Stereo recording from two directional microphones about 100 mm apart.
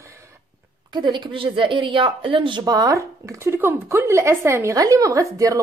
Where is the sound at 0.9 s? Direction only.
50° right (ahead or behind).